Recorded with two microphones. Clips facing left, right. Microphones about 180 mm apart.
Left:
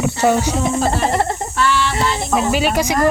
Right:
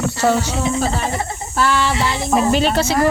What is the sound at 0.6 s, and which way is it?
Speech, 55° left (ahead or behind).